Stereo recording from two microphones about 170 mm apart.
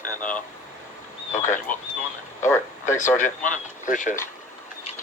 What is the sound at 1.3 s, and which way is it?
Speech, 45° left (ahead or behind).